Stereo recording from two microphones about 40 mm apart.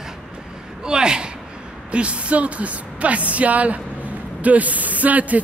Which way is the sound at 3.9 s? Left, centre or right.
Right.